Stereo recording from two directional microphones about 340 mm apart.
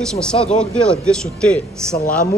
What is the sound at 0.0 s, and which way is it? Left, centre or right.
A man's voice, centre.